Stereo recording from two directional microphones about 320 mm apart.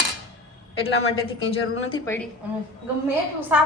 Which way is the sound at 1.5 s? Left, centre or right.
Centre.